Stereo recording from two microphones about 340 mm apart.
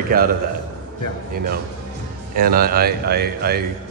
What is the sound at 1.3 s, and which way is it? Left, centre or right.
A man's voice, right.